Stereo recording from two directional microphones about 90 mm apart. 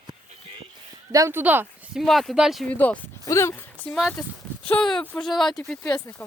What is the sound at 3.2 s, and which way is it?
Speech, 30° left (ahead or behind).